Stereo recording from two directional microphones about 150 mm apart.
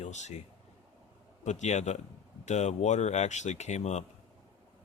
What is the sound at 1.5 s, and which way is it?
Speech, 50° left (ahead or behind).